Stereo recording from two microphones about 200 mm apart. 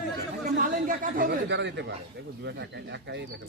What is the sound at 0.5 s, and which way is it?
Chatter, 45° right (ahead or behind).